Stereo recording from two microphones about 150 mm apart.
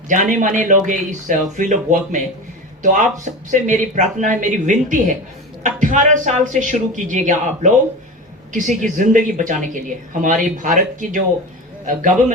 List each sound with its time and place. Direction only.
0.1 s speech: 55° right (ahead or behind)